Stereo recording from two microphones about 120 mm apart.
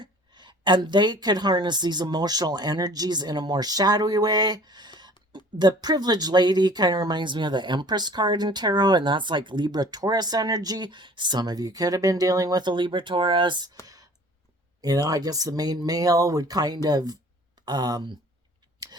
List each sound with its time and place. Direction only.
0.0 s a woman's voice: 40° right (ahead or behind)
13.8 s a sound: 30° right (ahead or behind)
14.8 s a woman's voice: 30° right (ahead or behind)